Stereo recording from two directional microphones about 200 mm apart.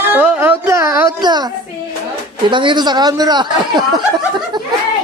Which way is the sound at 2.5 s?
25° right (ahead or behind).